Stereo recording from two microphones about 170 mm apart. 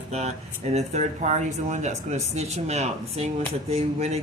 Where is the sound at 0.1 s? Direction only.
40° right (ahead or behind).